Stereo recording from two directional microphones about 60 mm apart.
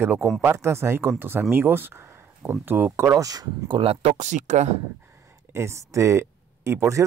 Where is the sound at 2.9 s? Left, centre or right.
Right.